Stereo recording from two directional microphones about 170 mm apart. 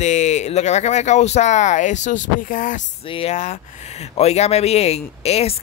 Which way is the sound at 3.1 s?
30° left (ahead or behind).